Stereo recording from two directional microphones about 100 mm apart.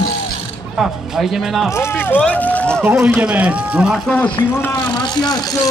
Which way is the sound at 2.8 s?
15° right (ahead or behind).